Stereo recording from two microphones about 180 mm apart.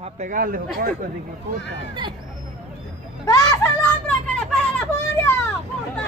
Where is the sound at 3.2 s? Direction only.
20° left (ahead or behind).